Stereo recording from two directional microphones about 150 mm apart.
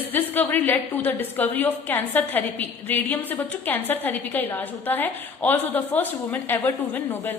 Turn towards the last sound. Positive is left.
turn(degrees=15)  # may be behind; listen again after turning